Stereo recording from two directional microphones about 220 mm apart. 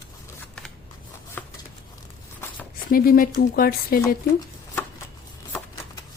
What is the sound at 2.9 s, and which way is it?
Speech, 40° left (ahead or behind).